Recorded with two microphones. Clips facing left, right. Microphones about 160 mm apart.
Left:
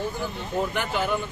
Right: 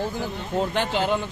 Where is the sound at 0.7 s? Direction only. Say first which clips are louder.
Right 3 dB; 90° right.